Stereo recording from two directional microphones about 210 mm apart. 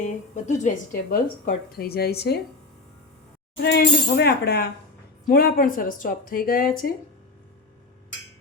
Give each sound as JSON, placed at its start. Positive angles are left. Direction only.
{"t": 0.0, "sound": "a woman's voice", "side_deg": 35}
{"t": 1.1, "sound": "speech", "side_deg": 45}
{"t": 3.6, "sound": "speech", "side_deg": 50}